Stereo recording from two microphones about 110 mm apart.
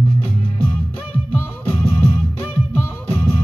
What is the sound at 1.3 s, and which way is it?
Music, 20° left (ahead or behind).